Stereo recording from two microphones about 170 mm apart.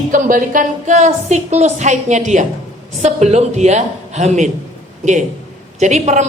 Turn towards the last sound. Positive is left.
turn(degrees=-40)  # may be behind; listen again after turning